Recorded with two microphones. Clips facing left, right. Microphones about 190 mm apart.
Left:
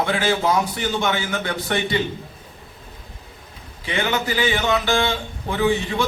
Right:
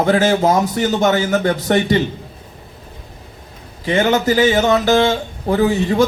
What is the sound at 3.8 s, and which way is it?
Speech, 40° right (ahead or behind).